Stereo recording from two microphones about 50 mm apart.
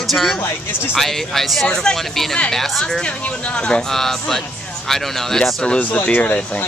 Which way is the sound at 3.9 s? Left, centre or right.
Centre.